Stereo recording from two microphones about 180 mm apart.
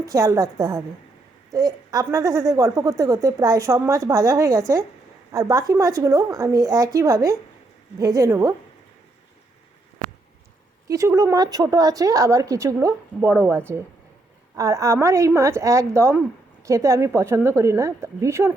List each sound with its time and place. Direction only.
0.0 s a woman's voice: 20° right (ahead or behind)
10.8 s a woman's voice: 20° right (ahead or behind)